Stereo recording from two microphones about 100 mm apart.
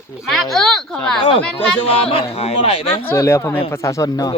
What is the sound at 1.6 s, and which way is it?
Speech, 70° left (ahead or behind).